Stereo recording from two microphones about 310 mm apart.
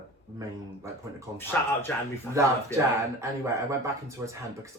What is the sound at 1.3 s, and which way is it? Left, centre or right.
Speech, centre.